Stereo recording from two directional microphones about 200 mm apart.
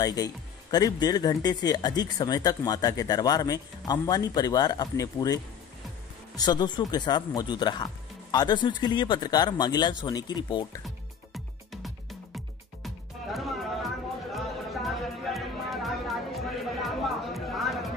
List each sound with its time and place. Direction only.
0.0 s speech: 20° left (ahead or behind)
11.3 s music: centre (ahead or behind)